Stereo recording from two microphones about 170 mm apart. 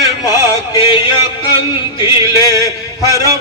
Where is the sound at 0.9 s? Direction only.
30° left (ahead or behind).